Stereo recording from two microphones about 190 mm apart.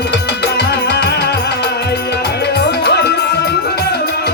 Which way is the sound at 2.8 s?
60° left (ahead or behind).